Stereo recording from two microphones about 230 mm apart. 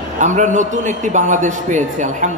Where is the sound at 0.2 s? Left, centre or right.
Right.